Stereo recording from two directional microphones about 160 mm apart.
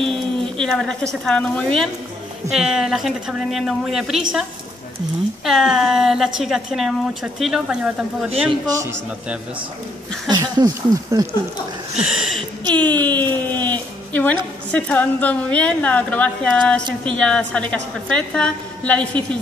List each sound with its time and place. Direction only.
0.0 s a woman's voice: 5° left (ahead or behind)
10.2 s speech: 25° right (ahead or behind)
12.0 s speech: centre (ahead or behind)
12.7 s a woman's voice: 10° left (ahead or behind)